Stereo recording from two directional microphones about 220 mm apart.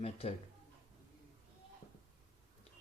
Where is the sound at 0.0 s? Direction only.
25° left (ahead or behind).